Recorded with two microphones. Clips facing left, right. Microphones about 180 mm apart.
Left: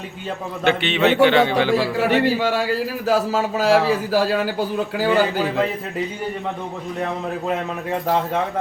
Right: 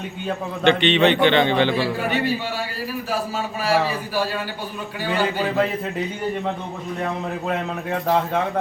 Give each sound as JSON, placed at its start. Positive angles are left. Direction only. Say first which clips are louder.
{"t": 0.6, "sound": "a man's voice", "louder": "right 2 dB", "side_deg": 5}
{"t": 1.7, "sound": "a man's voice", "louder": "left 4 dB", "side_deg": 80}